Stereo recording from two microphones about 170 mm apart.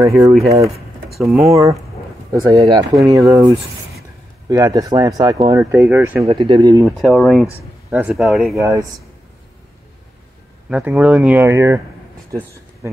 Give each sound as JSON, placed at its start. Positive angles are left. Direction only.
{"t": 0.0, "sound": "speech", "side_deg": -20}
{"t": 1.1, "sound": "speech", "side_deg": 0}
{"t": 1.5, "sound": "speech", "side_deg": -20}
{"t": 6.2, "sound": "speech", "side_deg": -30}
{"t": 7.0, "sound": "speech", "side_deg": 0}
{"t": 8.5, "sound": "speech", "side_deg": -15}
{"t": 10.7, "sound": "speech", "side_deg": -5}
{"t": 12.3, "sound": "a sound", "side_deg": -15}